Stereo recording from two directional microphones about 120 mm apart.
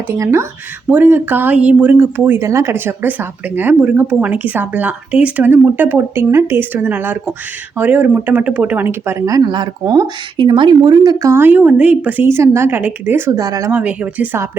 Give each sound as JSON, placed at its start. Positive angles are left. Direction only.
{"t": 0.1, "sound": "speech", "side_deg": -20}
{"t": 13.7, "sound": "speech", "side_deg": -10}